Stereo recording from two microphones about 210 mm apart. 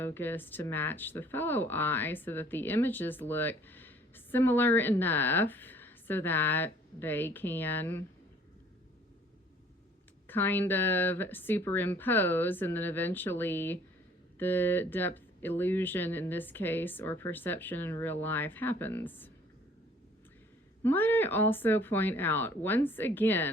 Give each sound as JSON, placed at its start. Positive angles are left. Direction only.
{"t": 0.0, "sound": "speech", "side_deg": 10}
{"t": 10.2, "sound": "speech", "side_deg": 10}
{"t": 20.8, "sound": "speech", "side_deg": 10}